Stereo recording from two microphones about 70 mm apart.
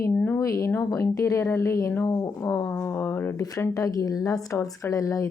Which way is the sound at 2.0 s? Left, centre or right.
Left.